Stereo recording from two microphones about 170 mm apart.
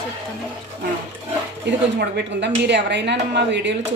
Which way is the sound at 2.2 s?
90° right.